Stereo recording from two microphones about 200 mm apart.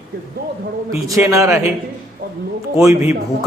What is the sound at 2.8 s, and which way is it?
Speech, 10° right (ahead or behind).